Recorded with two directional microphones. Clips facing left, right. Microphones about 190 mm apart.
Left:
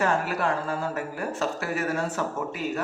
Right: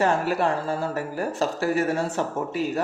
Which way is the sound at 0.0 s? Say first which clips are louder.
Right 3 dB; 30° right (ahead or behind).